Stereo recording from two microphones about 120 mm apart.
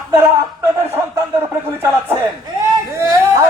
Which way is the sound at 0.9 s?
20° right (ahead or behind).